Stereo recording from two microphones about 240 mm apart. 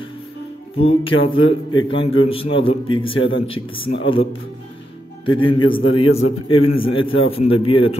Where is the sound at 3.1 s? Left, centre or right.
Left.